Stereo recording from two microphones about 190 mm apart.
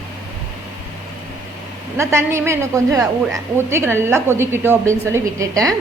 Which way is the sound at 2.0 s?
15° right (ahead or behind).